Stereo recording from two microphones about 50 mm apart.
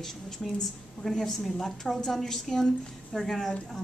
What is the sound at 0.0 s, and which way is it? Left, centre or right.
A woman's voice, centre.